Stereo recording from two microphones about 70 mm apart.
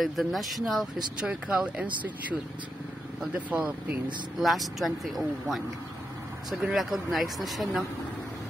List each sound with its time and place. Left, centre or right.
0.0 s speech: centre
3.3 s speech: centre
4.4 s speech: centre